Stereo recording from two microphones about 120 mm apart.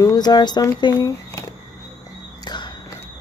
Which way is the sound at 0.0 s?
35° left (ahead or behind).